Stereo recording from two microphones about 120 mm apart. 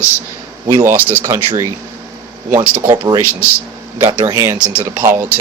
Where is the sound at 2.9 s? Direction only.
30° right (ahead or behind).